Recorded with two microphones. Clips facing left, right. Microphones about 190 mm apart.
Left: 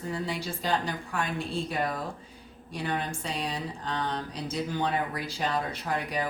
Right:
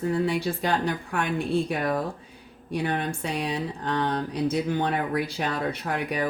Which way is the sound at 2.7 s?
55° right (ahead or behind).